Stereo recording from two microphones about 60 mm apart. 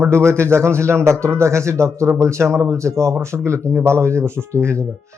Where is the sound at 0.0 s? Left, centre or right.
Right.